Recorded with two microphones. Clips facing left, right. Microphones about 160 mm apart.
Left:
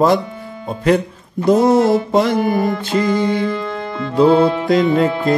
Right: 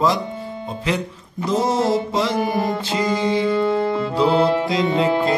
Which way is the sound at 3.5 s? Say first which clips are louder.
Right 5 dB; 30° right (ahead or behind).